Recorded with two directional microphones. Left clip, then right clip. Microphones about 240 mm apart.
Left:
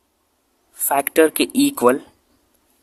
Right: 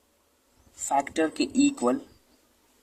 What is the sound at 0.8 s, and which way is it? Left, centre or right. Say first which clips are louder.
Speech: left 10 dB; left.